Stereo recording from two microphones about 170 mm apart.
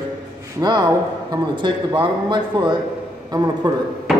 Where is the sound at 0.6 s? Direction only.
25° right (ahead or behind).